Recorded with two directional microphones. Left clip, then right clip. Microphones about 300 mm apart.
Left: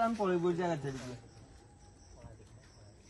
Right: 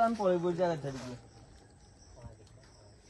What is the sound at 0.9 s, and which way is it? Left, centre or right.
Speech, centre.